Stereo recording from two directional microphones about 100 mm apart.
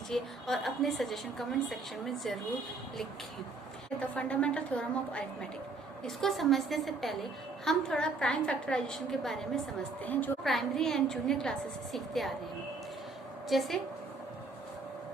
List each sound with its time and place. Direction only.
0.1 s a woman's voice: 5° left (ahead or behind)
3.8 s a woman's voice: 10° left (ahead or behind)
10.0 s a woman's voice: 15° left (ahead or behind)
10.4 s a woman's voice: 5° left (ahead or behind)
13.5 s a woman's voice: centre (ahead or behind)